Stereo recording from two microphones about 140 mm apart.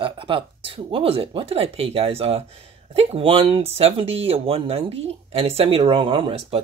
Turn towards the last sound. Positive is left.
turn(degrees=-40)  # may be behind; listen again after turning